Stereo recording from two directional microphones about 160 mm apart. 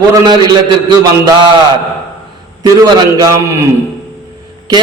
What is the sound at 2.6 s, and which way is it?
Speech, 20° right (ahead or behind).